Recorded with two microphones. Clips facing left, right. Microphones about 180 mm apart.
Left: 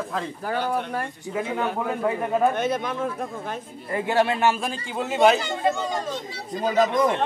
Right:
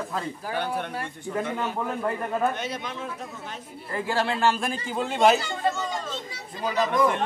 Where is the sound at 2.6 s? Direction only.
50° left (ahead or behind).